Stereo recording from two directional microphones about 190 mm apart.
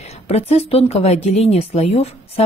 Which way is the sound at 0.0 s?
35° left (ahead or behind).